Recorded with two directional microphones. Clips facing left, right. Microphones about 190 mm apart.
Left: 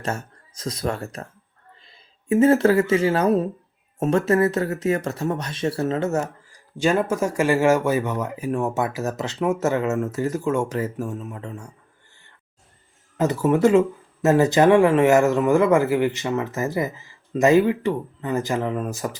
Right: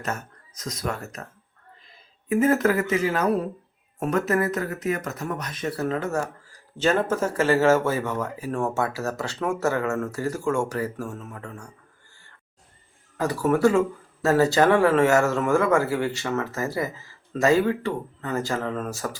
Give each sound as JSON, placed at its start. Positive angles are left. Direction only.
{"t": 0.0, "sound": "speech", "side_deg": 30}
{"t": 2.3, "sound": "speech", "side_deg": 30}
{"t": 13.1, "sound": "speech", "side_deg": 20}